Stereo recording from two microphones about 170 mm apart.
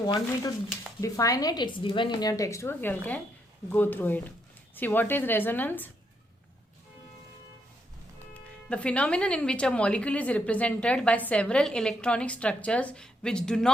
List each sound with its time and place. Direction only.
0.0 s a woman's voice: 25° left (ahead or behind)
8.3 s speech: 5° left (ahead or behind)